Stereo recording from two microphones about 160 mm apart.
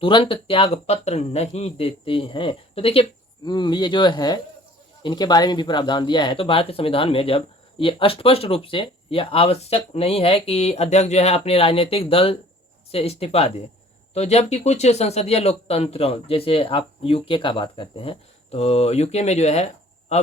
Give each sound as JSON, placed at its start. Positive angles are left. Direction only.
{"t": 0.0, "sound": "speech", "side_deg": 30}